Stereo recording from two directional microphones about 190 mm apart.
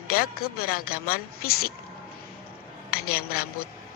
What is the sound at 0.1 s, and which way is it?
Speech, 50° left (ahead or behind).